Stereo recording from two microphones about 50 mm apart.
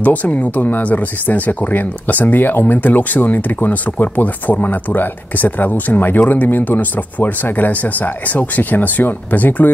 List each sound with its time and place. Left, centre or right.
0.0 s speech: left